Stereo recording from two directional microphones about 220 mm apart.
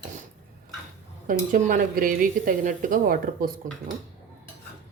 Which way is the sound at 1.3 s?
35° right (ahead or behind).